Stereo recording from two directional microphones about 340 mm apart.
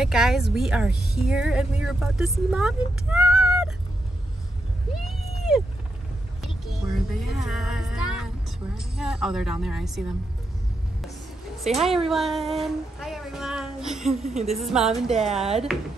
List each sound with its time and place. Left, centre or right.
0.0 s speech: centre
5.0 s a sound: centre
6.4 s music: centre
8.7 s speech: centre
11.7 s speech: centre
15.3 s speech: centre